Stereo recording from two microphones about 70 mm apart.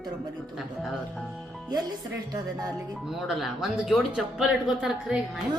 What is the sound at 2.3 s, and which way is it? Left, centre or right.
Speech, right.